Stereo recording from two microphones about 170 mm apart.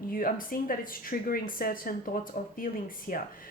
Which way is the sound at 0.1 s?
55° left (ahead or behind).